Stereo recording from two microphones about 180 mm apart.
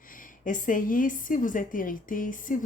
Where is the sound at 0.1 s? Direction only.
45° left (ahead or behind).